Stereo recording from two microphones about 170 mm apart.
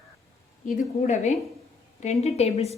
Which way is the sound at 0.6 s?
45° left (ahead or behind).